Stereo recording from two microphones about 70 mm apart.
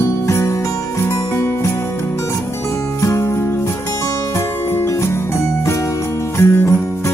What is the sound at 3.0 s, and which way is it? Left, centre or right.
Music, left.